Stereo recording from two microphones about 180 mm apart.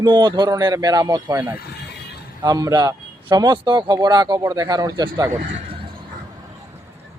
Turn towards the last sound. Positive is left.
turn(degrees=-20)  # may be behind; listen again after turning